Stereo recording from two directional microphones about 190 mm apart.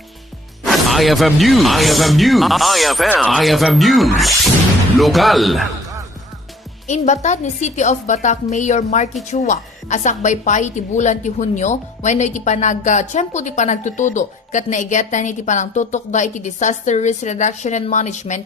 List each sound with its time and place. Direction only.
0.6 s speech: centre (ahead or behind)
6.8 s a woman's voice: 40° left (ahead or behind)